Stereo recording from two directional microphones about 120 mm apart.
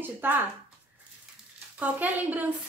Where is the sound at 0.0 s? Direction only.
15° right (ahead or behind).